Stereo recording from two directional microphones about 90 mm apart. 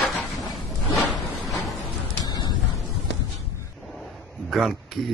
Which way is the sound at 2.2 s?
50° left (ahead or behind).